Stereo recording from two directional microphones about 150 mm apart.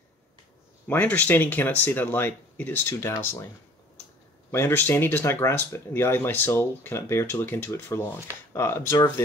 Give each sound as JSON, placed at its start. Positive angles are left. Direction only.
{"t": 0.8, "sound": "speech", "side_deg": 10}
{"t": 4.5, "sound": "speech", "side_deg": 15}